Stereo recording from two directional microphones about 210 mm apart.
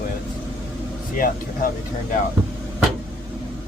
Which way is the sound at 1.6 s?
40° left (ahead or behind).